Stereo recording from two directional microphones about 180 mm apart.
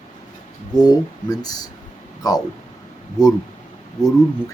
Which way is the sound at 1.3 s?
20° left (ahead or behind).